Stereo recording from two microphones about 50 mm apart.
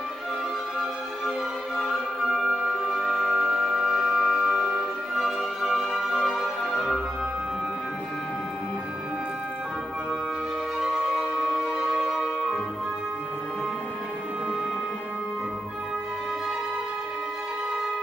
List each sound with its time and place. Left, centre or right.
2.6 s music: centre
10.8 s music: centre